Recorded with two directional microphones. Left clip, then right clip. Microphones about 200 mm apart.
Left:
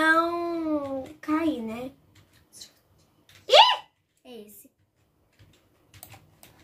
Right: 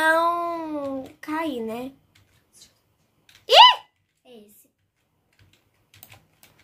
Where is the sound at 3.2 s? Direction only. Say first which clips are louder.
Right 5 dB; 45° right (ahead or behind).